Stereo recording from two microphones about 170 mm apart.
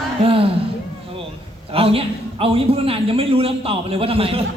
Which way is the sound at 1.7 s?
35° right (ahead or behind).